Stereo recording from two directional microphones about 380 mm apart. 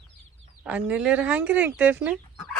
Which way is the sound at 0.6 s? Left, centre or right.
Centre.